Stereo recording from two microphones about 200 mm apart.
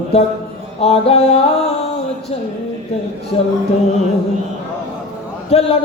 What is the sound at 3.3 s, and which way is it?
Music, 30° left (ahead or behind).